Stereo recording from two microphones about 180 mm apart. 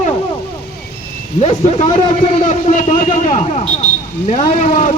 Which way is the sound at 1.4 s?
35° left (ahead or behind).